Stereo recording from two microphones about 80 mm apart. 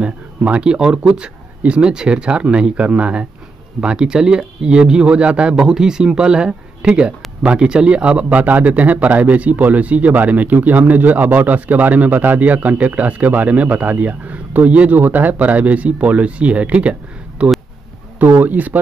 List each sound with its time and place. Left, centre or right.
0.0 s speech: centre